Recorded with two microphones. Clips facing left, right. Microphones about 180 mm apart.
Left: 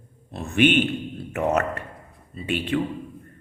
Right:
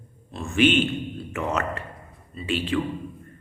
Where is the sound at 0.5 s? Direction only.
55° left (ahead or behind).